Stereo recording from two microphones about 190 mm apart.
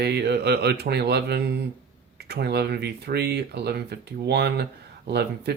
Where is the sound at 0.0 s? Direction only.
60° right (ahead or behind).